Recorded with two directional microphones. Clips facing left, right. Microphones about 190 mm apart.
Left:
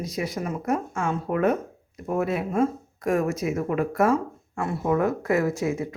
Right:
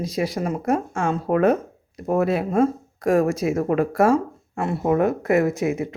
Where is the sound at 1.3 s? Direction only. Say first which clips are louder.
Right 5 dB; 90° right.